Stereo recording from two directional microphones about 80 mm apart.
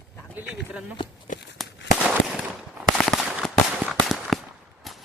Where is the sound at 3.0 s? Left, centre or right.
Centre.